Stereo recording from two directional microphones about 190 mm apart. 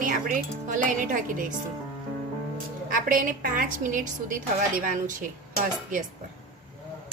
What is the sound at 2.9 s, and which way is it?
A woman's voice, 45° right (ahead or behind).